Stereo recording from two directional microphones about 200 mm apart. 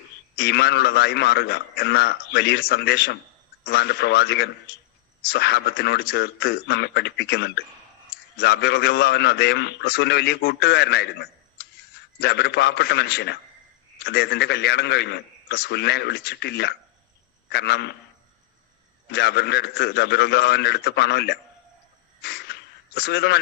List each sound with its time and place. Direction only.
0.3 s a man's voice: 55° left (ahead or behind)
19.1 s a man's voice: 55° left (ahead or behind)
22.2 s a sound: 55° left (ahead or behind)